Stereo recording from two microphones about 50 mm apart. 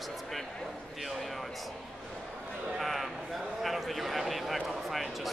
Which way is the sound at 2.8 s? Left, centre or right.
Centre.